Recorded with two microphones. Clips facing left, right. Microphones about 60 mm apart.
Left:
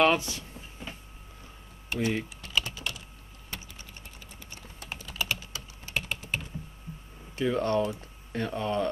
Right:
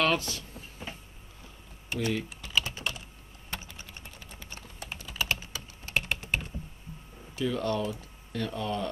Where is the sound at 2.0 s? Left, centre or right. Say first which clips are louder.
Left 1 dB; left.